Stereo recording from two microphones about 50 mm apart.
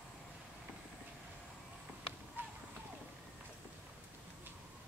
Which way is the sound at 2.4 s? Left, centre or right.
Right.